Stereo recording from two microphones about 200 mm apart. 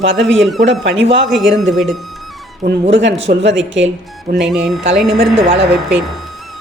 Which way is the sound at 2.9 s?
65° right (ahead or behind).